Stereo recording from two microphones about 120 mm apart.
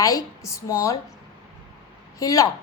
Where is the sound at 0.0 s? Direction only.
25° left (ahead or behind).